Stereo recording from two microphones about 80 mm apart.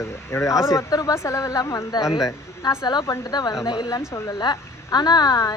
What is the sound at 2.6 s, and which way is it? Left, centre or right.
A woman's voice, left.